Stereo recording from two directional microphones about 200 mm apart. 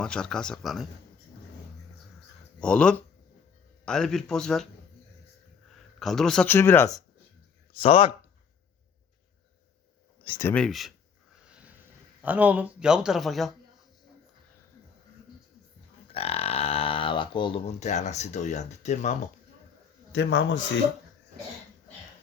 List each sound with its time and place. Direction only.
0.0 s speech: 5° left (ahead or behind)
2.6 s speech: 5° left (ahead or behind)
7.8 s speech: 25° left (ahead or behind)
10.2 s speech: 20° left (ahead or behind)
10.5 s speech: centre (ahead or behind)
11.4 s a sound: 5° right (ahead or behind)
12.2 s speech: 10° right (ahead or behind)
16.1 s speech: 30° left (ahead or behind)
20.1 s speech: 65° left (ahead or behind)